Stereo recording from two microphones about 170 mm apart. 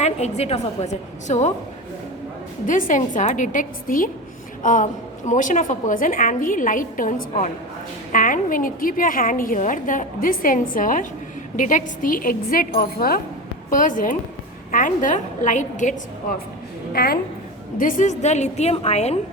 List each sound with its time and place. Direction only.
0.0 s a woman's voice: 40° left (ahead or behind)
2.6 s a woman's voice: 50° left (ahead or behind)
16.9 s a woman's voice: 65° left (ahead or behind)
17.7 s a woman's voice: 50° left (ahead or behind)